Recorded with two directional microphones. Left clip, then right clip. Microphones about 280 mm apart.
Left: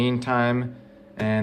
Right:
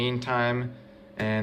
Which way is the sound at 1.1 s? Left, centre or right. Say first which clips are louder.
Left 3 dB; centre.